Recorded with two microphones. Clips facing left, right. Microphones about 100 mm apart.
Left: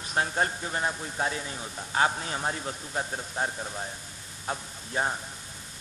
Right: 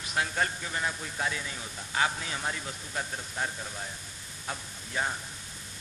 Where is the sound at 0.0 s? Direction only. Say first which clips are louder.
Left 3 dB; 35° left (ahead or behind).